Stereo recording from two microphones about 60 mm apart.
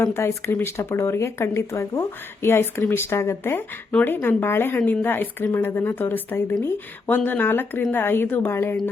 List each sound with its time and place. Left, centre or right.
0.0 s speech: left
4.0 s a woman's voice: left